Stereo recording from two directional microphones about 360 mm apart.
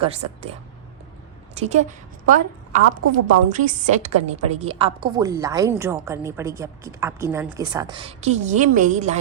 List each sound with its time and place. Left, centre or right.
1.5 s a woman's voice: centre